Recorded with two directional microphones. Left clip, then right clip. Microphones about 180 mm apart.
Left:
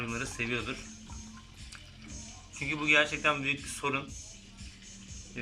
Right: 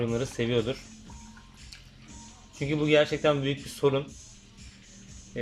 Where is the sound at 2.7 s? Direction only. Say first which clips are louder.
Right 3 dB; 30° right (ahead or behind).